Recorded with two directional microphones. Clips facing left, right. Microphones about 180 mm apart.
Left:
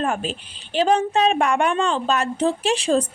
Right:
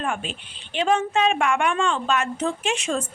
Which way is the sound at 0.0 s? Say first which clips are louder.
Left 4 dB; 40° left (ahead or behind).